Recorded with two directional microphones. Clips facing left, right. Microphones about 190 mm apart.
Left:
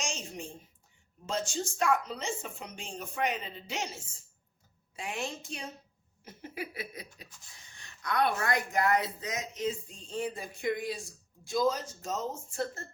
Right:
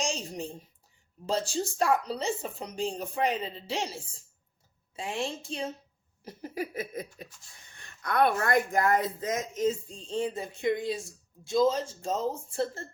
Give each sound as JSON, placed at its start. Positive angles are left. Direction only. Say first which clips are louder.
{"t": 0.0, "sound": "a sound", "louder": "right 6 dB", "side_deg": -35}
{"t": 1.3, "sound": "a woman's voice", "louder": "right 4 dB", "side_deg": -35}
{"t": 6.2, "sound": "speech", "louder": "right 5 dB", "side_deg": -40}
{"t": 9.9, "sound": "speech", "louder": "right 4 dB", "side_deg": -30}